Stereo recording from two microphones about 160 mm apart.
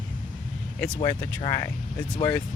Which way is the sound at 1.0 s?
20° left (ahead or behind).